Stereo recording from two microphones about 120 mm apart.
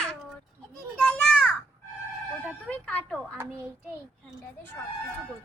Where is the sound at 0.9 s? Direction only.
5° left (ahead or behind).